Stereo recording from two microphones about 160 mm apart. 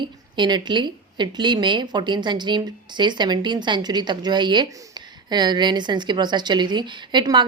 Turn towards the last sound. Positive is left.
turn(degrees=-30)  # may be behind; listen again after turning